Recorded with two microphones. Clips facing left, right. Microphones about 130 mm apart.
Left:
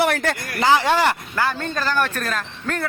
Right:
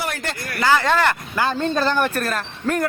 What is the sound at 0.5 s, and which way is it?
Speech, 20° left (ahead or behind).